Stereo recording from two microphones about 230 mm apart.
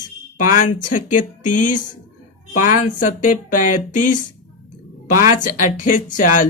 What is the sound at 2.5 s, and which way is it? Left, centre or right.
A woman's voice, left.